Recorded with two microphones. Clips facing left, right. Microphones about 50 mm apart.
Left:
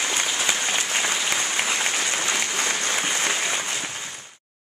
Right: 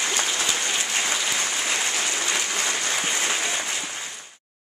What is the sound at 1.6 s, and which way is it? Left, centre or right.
Applause, left.